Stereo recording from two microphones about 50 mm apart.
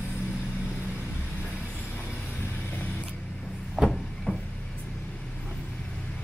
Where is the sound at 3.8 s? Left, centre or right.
Centre.